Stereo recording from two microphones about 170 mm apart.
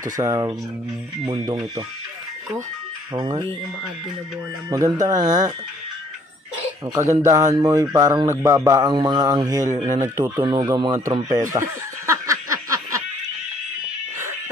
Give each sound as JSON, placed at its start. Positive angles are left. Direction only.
{"t": 0.0, "sound": "speech", "side_deg": -20}
{"t": 3.2, "sound": "speech", "side_deg": -20}
{"t": 4.6, "sound": "speech", "side_deg": -20}
{"t": 6.9, "sound": "speech", "side_deg": -20}